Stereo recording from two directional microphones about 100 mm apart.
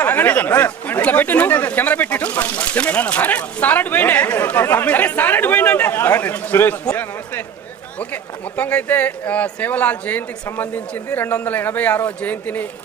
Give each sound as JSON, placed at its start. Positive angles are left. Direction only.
{"t": 0.0, "sound": "speech", "side_deg": 20}